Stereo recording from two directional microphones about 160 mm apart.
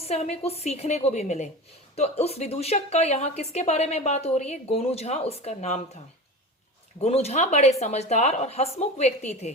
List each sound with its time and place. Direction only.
0.0 s a woman's voice: 45° left (ahead or behind)
7.0 s a woman's voice: 40° left (ahead or behind)